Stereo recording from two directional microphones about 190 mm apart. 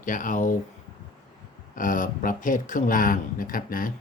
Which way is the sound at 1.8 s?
45° left (ahead or behind).